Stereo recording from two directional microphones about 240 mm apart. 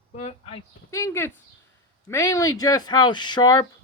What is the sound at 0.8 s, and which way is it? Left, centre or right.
Speech, centre.